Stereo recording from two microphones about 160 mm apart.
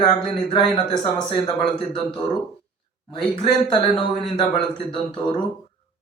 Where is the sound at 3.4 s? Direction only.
30° left (ahead or behind).